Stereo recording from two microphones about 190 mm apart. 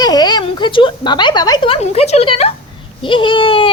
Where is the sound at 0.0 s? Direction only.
20° left (ahead or behind).